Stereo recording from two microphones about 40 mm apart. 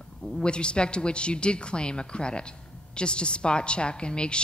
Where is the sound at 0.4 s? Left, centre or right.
Left.